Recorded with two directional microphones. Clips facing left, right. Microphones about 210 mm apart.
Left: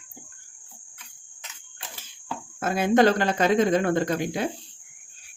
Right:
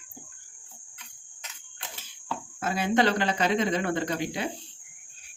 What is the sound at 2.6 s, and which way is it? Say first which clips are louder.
Speech: left 5 dB; 50° left (ahead or behind).